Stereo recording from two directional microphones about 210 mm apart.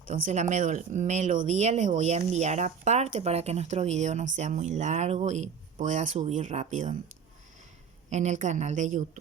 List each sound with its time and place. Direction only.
0.1 s speech: 35° right (ahead or behind)
8.1 s speech: 35° right (ahead or behind)